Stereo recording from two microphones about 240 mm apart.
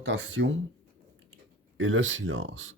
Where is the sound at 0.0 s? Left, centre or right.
Right.